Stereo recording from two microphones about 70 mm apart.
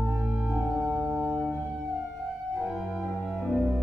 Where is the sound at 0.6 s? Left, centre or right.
Right.